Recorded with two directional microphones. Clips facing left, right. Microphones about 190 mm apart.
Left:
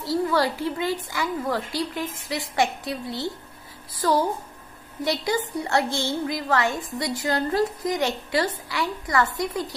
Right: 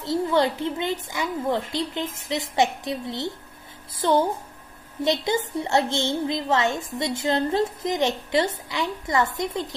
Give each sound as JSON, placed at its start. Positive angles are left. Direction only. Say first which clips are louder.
{"t": 0.0, "sound": "a woman's voice", "louder": "right 1 dB", "side_deg": -20}